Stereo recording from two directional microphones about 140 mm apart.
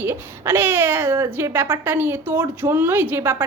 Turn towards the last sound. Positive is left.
turn(degrees=-15)  # may be behind; listen again after turning